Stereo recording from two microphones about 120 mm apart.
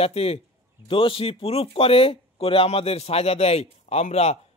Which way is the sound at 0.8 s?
45° left (ahead or behind).